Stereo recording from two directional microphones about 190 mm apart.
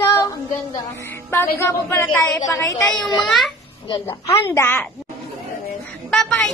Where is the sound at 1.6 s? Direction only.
10° left (ahead or behind).